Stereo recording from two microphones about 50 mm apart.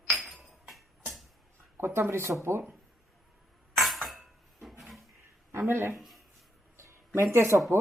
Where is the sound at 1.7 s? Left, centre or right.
Right.